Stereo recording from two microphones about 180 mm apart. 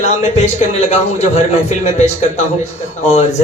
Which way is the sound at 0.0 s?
40° left (ahead or behind).